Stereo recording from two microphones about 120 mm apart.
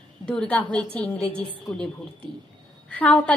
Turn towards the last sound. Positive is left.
turn(degrees=10)  # may be behind; listen again after turning